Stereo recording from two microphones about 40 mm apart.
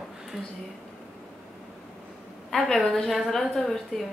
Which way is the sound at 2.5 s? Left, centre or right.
Centre.